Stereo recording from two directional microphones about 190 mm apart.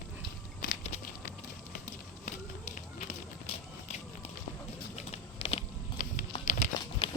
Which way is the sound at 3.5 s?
30° left (ahead or behind).